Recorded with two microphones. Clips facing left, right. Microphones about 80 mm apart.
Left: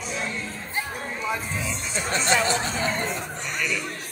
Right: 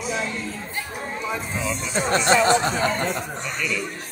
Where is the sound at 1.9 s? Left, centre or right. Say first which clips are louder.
Right 5 dB; right.